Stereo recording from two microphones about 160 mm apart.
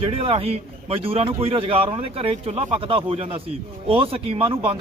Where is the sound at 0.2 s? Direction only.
35° right (ahead or behind).